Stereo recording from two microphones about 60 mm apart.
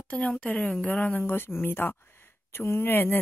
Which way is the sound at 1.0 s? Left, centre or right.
Left.